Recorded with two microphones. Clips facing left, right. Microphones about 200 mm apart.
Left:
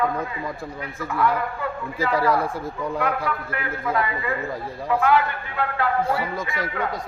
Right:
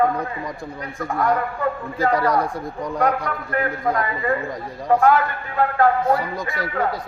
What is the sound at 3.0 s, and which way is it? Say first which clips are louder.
A man's voice: right 6 dB; 40° right (ahead or behind).